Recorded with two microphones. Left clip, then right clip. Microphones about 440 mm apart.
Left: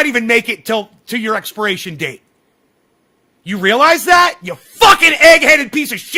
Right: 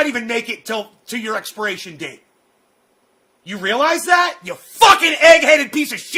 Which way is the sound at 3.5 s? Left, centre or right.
Left.